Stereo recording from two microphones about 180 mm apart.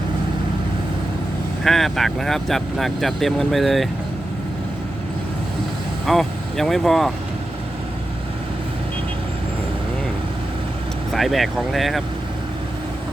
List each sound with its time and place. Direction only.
1.6 s speech: centre (ahead or behind)
6.1 s speech: centre (ahead or behind)
11.1 s speech: centre (ahead or behind)